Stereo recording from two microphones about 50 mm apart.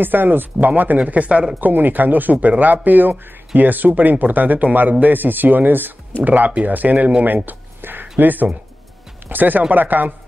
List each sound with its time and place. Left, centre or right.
0.0 s speech: right
7.4 s a sound: right
9.3 s speech: right